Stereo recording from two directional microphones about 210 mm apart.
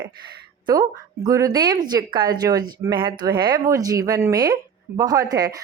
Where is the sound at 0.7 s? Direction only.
20° right (ahead or behind).